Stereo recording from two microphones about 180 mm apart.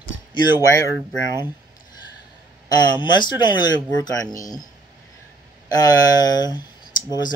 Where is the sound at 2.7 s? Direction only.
25° left (ahead or behind).